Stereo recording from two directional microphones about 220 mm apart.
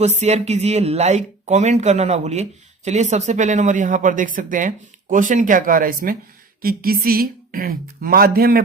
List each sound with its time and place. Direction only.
0.0 s speech: 30° right (ahead or behind)